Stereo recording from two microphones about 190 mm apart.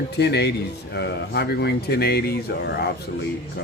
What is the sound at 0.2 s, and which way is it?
Speech, 60° left (ahead or behind).